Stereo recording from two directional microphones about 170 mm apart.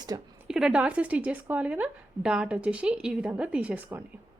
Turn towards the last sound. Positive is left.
turn(degrees=-10)  # may be behind; listen again after turning